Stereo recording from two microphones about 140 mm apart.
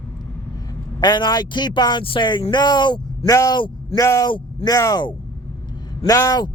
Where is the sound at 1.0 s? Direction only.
30° left (ahead or behind).